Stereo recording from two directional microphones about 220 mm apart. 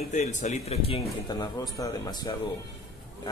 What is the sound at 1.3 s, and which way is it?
Speech, 20° left (ahead or behind).